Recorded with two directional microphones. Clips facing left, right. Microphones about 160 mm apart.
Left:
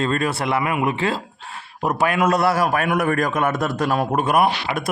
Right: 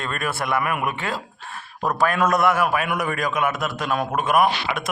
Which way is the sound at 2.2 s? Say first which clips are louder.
Left 1 dB; 30° left (ahead or behind).